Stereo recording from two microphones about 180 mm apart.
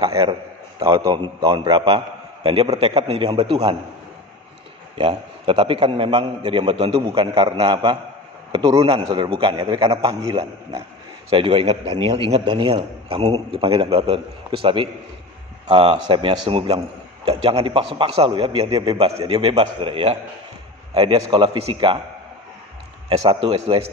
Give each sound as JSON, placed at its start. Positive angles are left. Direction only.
{"t": 0.0, "sound": "a man's voice", "side_deg": -30}
{"t": 4.9, "sound": "a man's voice", "side_deg": -30}
{"t": 23.0, "sound": "a man's voice", "side_deg": -25}